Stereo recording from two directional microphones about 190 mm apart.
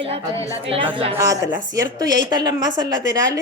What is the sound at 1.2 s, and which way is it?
Speech, 15° right (ahead or behind).